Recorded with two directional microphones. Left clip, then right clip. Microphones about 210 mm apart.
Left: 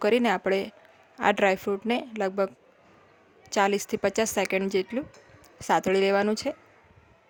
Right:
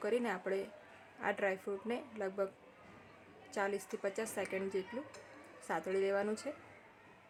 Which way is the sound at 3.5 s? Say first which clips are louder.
Left 14 dB; 45° left (ahead or behind).